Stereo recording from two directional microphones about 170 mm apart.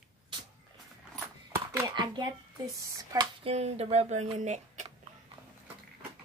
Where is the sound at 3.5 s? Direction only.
40° right (ahead or behind).